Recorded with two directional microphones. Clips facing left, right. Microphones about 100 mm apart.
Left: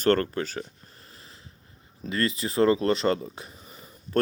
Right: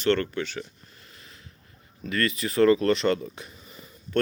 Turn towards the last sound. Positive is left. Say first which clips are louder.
# even
turn(degrees=35)  # may be behind; listen again after turning